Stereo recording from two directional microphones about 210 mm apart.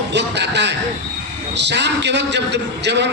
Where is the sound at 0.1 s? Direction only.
55° right (ahead or behind).